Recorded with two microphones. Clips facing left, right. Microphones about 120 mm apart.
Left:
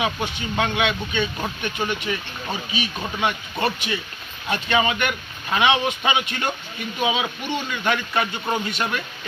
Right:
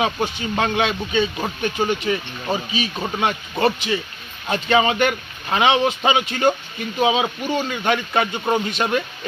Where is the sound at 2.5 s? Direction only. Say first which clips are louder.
Right 5 dB; 30° right (ahead or behind).